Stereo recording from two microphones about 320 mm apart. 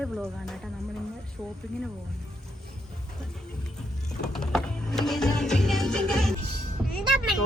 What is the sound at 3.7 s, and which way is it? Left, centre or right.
Music, centre.